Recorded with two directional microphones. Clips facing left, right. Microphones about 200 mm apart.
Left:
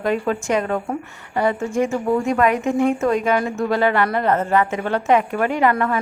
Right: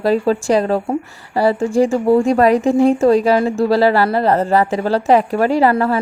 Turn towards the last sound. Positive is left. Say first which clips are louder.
# right 5 dB
turn(degrees=-35)  # may be behind; listen again after turning